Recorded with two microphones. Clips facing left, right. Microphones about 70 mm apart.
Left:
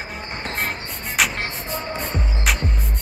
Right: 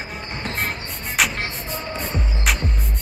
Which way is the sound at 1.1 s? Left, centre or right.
Centre.